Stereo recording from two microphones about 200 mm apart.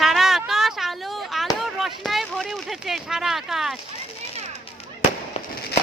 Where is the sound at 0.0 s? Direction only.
Centre (ahead or behind).